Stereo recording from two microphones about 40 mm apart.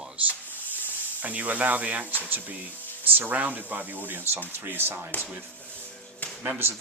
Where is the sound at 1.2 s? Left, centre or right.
Right.